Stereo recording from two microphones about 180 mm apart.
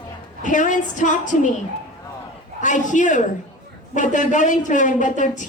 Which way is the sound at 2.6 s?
45° left (ahead or behind).